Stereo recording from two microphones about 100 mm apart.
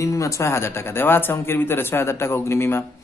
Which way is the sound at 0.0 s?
30° left (ahead or behind).